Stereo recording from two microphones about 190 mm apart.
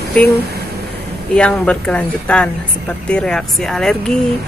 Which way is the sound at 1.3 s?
5° left (ahead or behind).